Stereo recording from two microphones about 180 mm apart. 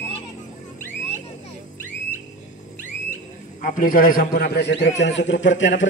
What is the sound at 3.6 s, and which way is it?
A man's voice, 50° left (ahead or behind).